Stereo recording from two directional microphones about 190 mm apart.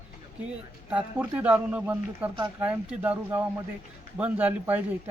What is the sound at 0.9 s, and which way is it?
A man's voice, 5° right (ahead or behind).